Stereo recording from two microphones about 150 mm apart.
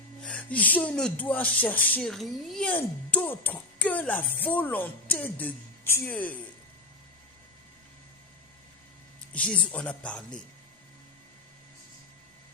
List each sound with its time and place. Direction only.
0.2 s speech: 10° left (ahead or behind)
9.3 s speech: 10° left (ahead or behind)